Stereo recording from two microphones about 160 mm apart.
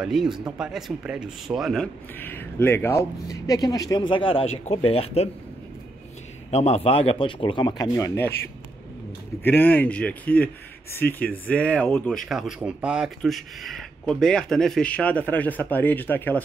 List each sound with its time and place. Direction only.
0.0 s speech: centre (ahead or behind)
2.1 s speech: 10° left (ahead or behind); by 5.3 s 40° left (ahead or behind)
6.5 s speech: 40° left (ahead or behind); by 8.4 s 15° left (ahead or behind)
9.4 s speech: 10° left (ahead or behind)
12.3 s speech: centre (ahead or behind)